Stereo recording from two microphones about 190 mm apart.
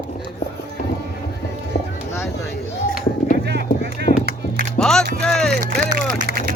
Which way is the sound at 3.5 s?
60° right (ahead or behind).